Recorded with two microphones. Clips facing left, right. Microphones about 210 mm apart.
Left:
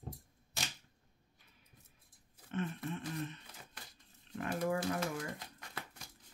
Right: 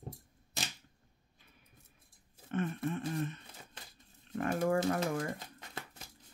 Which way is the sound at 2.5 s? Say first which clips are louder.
Right 4 dB; 50° right (ahead or behind).